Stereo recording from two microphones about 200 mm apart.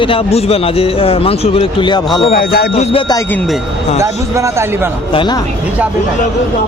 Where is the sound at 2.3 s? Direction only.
50° left (ahead or behind).